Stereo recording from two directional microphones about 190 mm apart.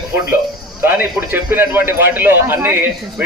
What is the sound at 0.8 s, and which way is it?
A man's voice, 10° right (ahead or behind).